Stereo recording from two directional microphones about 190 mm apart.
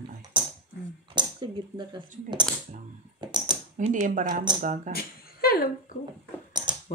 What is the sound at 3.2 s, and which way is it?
Typing, 20° right (ahead or behind).